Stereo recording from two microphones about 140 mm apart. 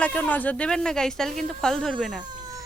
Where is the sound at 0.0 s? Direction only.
10° left (ahead or behind).